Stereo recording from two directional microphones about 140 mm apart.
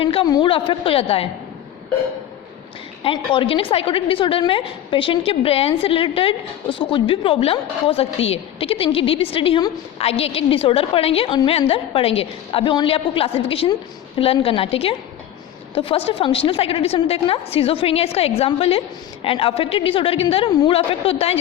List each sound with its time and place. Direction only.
0.0 s a woman's voice: 40° left (ahead or behind)
3.0 s a woman's voice: 40° left (ahead or behind)